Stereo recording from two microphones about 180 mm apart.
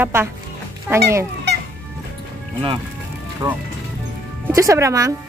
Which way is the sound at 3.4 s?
25° right (ahead or behind).